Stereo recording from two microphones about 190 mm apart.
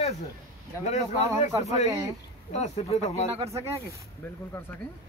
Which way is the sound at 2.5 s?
35° left (ahead or behind).